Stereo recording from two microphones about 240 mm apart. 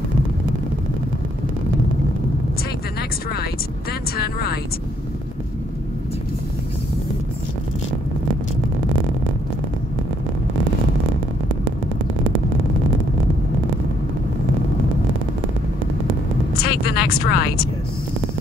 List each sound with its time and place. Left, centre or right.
16.6 s vehicle: left